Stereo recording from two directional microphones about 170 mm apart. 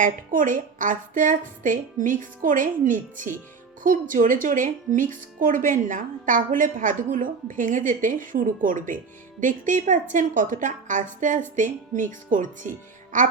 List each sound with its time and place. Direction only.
0.0 s a woman's voice: 50° right (ahead or behind)